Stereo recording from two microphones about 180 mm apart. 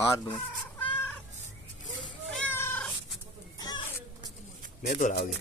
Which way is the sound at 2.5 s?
10° left (ahead or behind).